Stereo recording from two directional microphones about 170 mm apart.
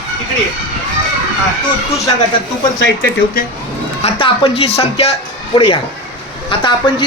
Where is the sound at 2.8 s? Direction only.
90° left.